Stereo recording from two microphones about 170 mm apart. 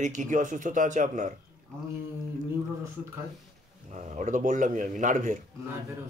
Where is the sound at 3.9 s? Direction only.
45° right (ahead or behind).